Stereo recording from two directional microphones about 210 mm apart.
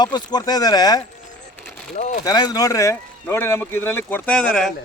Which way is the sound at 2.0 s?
35° left (ahead or behind).